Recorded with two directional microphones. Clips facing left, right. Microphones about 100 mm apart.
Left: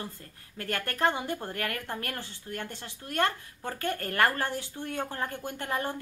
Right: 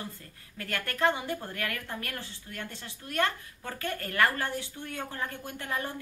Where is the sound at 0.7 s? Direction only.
30° left (ahead or behind).